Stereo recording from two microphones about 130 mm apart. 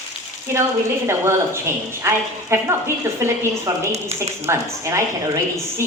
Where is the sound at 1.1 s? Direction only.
20° right (ahead or behind).